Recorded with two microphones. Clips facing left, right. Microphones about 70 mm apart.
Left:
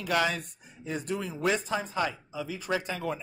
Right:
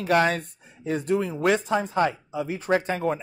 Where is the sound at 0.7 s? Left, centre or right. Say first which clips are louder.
Right 8 dB; right.